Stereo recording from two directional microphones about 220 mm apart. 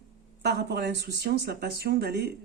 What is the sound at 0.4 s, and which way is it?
Speech, 50° right (ahead or behind).